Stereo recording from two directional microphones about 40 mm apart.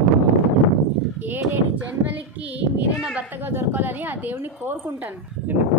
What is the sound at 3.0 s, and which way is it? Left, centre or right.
Speech, right.